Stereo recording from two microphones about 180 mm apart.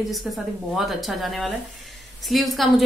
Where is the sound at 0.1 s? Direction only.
Centre (ahead or behind).